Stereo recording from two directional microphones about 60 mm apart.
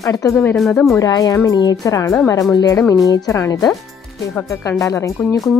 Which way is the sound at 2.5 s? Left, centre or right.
Left.